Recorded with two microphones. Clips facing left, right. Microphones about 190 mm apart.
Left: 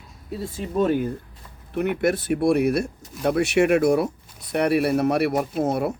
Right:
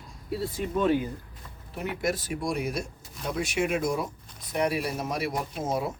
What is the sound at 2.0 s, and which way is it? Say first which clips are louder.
Speech: left 8 dB; 60° left (ahead or behind).